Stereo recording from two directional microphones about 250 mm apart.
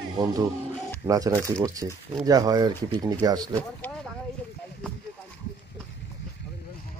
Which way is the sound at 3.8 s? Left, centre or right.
Centre.